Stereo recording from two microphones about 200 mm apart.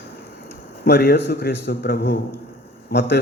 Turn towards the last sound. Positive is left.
turn(degrees=60)  # may be behind; listen again after turning